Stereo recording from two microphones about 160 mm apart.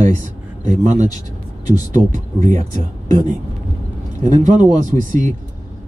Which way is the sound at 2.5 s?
20° left (ahead or behind).